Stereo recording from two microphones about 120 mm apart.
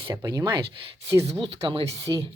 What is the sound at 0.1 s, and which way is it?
Speech, 30° right (ahead or behind).